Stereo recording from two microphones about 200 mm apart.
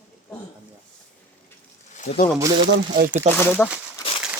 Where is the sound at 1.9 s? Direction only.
35° left (ahead or behind).